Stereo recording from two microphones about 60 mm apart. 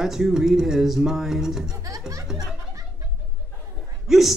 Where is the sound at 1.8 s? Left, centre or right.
Right.